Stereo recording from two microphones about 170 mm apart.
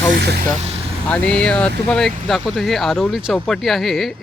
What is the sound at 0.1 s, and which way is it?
Vehicle, 65° right (ahead or behind).